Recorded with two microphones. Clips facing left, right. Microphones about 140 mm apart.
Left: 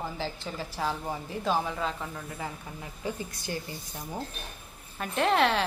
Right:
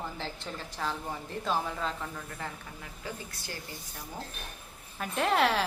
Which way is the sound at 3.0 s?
20° left (ahead or behind).